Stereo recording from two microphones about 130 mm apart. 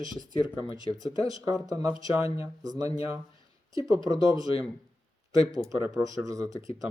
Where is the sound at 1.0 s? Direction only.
30° right (ahead or behind).